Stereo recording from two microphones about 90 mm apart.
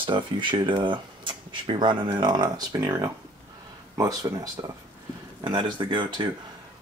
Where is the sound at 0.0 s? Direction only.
65° right (ahead or behind); by 4.5 s 45° right (ahead or behind).